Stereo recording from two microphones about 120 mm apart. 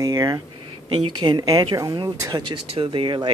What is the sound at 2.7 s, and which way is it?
Speech, 45° right (ahead or behind).